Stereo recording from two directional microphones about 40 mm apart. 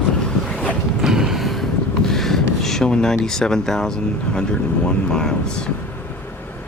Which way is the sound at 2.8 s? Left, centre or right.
Centre.